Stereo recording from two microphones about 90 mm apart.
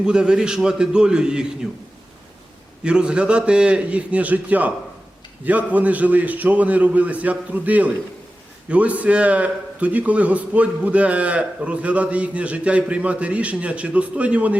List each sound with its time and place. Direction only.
0.0 s a man's voice: 10° right (ahead or behind)
2.8 s a man's voice: 10° right (ahead or behind)